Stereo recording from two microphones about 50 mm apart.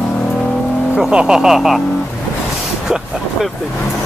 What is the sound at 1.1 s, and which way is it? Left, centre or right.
Speech, centre.